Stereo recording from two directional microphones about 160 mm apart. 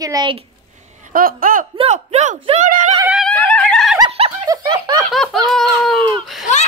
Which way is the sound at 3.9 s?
35° right (ahead or behind).